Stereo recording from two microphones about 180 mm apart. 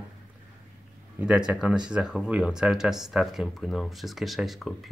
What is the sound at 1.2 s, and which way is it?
Speech, 5° right (ahead or behind).